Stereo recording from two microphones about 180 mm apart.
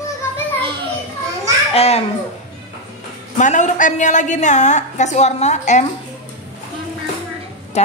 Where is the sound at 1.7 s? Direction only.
35° left (ahead or behind).